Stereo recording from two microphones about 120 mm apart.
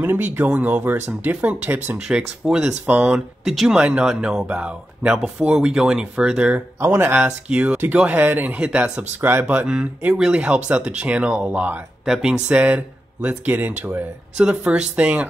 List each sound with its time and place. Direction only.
0.0 s speech: 15° right (ahead or behind)
6.8 s speech: 20° right (ahead or behind)
7.2 s speech: 10° right (ahead or behind)